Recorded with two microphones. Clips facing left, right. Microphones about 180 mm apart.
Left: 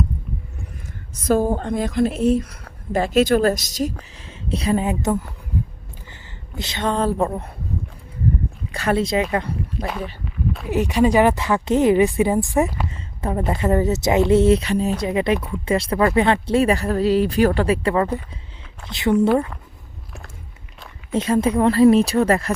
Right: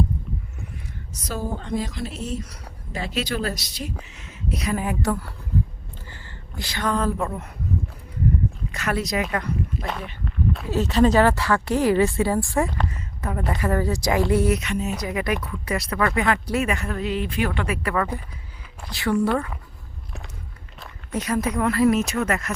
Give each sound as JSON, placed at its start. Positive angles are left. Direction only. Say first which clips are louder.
{"t": 1.1, "sound": "a woman's voice", "louder": "left 11 dB", "side_deg": 50}
{"t": 4.1, "sound": "a woman's voice", "louder": "left 3 dB", "side_deg": 30}
{"t": 8.7, "sound": "a woman's voice", "louder": "left 7 dB", "side_deg": 30}
{"t": 9.7, "sound": "speech", "louder": "left 3 dB", "side_deg": 0}
{"t": 10.2, "sound": "a sound", "louder": "right 4 dB", "side_deg": 0}
{"t": 10.7, "sound": "a woman's voice", "louder": "left 2 dB", "side_deg": 15}
{"t": 21.1, "sound": "a woman's voice", "louder": "left 6 dB", "side_deg": 25}